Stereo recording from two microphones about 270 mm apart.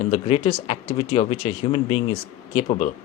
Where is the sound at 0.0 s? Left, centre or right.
Left.